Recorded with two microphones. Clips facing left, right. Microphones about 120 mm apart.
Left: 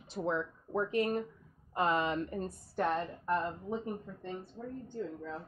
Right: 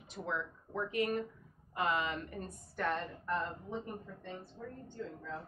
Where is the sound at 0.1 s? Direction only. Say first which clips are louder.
Left 5 dB; 30° left (ahead or behind).